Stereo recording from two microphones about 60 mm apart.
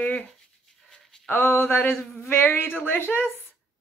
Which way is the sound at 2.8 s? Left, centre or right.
Left.